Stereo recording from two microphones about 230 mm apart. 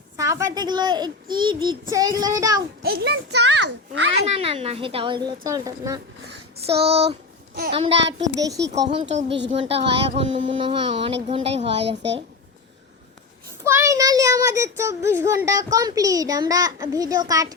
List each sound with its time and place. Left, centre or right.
0.2 s a child's voice: centre
2.8 s a child's voice: right
4.3 s speech: right
6.7 s a child's voice: right
13.7 s a child's voice: centre